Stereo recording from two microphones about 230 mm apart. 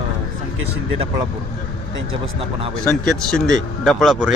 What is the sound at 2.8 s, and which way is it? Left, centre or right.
Speech, centre.